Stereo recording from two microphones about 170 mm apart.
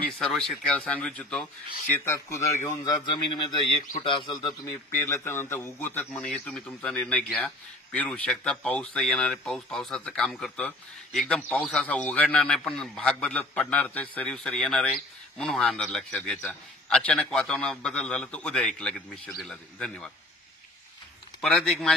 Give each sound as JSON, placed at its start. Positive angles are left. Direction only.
{"t": 0.2, "sound": "a man's voice", "side_deg": 0}
{"t": 4.6, "sound": "a man's voice", "side_deg": 15}
{"t": 21.4, "sound": "a man's voice", "side_deg": 0}